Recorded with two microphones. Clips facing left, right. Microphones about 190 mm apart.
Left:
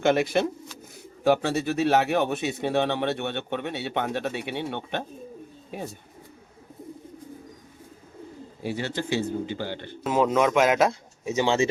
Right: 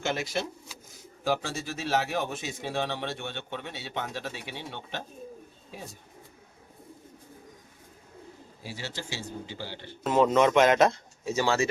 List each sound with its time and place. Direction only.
0.0 s speech: 60° left (ahead or behind)
8.6 s speech: 60° left (ahead or behind)
10.0 s speech: 5° left (ahead or behind)
11.3 s speech: 20° left (ahead or behind)